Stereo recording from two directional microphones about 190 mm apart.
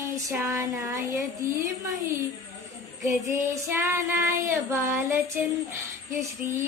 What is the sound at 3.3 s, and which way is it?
Speech, 15° right (ahead or behind).